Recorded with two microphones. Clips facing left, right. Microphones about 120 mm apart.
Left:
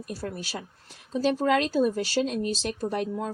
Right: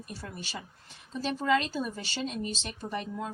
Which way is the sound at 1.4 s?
50° left (ahead or behind).